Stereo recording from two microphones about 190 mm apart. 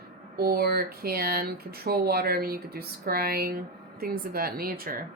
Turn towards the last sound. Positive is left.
turn(degrees=-50)  # may be behind; listen again after turning